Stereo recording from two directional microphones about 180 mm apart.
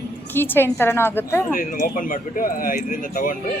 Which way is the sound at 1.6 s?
45° left (ahead or behind).